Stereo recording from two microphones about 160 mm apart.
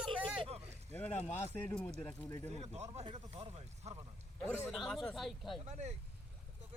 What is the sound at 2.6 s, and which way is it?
Speech, 45° right (ahead or behind).